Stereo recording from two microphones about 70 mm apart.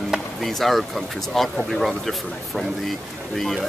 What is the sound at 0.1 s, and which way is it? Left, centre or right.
Speech, centre.